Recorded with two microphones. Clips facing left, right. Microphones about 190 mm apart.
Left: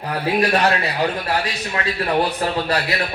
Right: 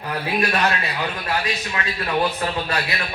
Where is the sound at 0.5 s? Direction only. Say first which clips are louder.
Left 4 dB; 35° left (ahead or behind).